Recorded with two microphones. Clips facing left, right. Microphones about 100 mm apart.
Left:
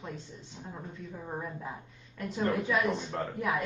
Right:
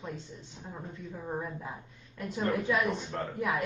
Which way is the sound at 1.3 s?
Centre (ahead or behind).